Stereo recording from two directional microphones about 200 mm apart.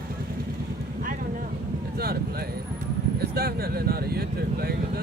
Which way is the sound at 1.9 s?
50° right (ahead or behind).